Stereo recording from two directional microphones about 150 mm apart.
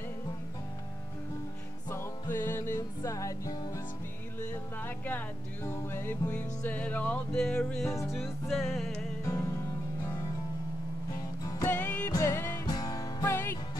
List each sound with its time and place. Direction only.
1.9 s music: 15° left (ahead or behind)
9.2 s music: 20° left (ahead or behind)
11.4 s music: 20° left (ahead or behind)